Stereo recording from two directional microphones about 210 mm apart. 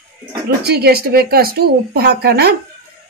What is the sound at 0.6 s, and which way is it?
Speech, 50° right (ahead or behind).